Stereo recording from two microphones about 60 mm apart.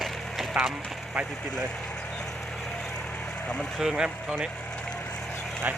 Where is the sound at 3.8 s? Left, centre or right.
Centre.